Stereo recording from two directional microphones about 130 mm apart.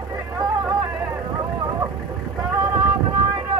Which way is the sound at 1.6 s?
30° right (ahead or behind).